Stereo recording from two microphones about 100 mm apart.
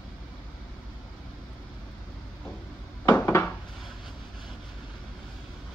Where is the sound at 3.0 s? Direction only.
25° left (ahead or behind).